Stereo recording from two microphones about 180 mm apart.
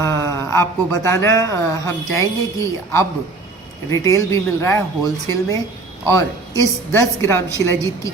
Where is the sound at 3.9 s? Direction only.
15° left (ahead or behind).